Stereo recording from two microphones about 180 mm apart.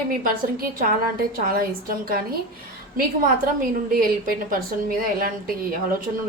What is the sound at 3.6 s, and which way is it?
A woman's voice, 55° right (ahead or behind).